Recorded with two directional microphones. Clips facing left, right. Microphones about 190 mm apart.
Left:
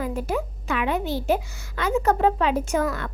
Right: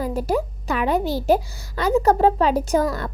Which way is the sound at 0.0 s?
35° right (ahead or behind).